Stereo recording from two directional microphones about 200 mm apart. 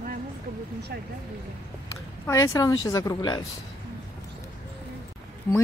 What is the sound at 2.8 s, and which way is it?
Speech, 20° left (ahead or behind).